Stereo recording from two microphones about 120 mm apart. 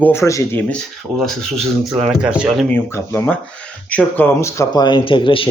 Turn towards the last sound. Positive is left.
turn(degrees=45)  # may be behind; listen again after turning